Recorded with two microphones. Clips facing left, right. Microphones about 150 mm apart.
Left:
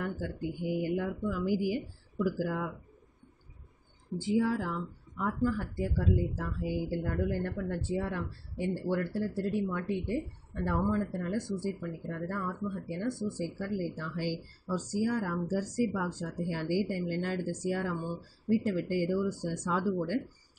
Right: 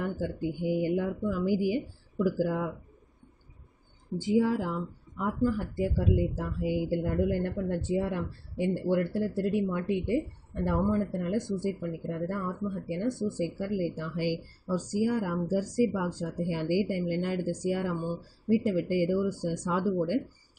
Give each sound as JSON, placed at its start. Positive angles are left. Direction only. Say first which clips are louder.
{"t": 0.0, "sound": "speech", "louder": "right 4 dB", "side_deg": -20}
{"t": 4.2, "sound": "a woman's voice", "louder": "right 3 dB", "side_deg": -20}